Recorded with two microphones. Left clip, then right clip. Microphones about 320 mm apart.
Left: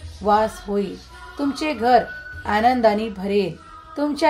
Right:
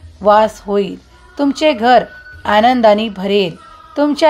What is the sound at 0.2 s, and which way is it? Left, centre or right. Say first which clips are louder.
A woman's voice: right 8 dB; right.